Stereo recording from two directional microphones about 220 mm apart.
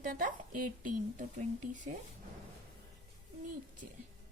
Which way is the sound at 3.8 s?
35° right (ahead or behind).